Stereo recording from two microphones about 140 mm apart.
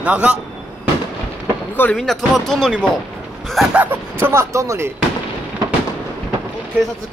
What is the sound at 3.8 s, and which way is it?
Speech, 15° right (ahead or behind).